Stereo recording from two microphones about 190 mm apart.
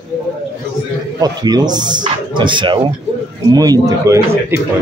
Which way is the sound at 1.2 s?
20° right (ahead or behind).